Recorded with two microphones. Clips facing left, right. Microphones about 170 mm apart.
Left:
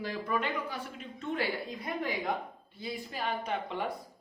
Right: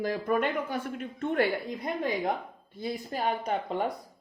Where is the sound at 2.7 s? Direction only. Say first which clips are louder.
Right 5 dB; 45° right (ahead or behind).